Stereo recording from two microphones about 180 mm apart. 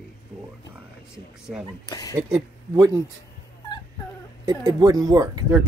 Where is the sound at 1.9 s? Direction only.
20° left (ahead or behind).